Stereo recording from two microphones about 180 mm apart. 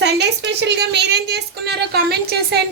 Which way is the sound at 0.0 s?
70° right (ahead or behind).